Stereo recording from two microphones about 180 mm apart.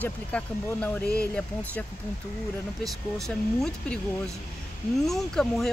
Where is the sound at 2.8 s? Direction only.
Centre (ahead or behind).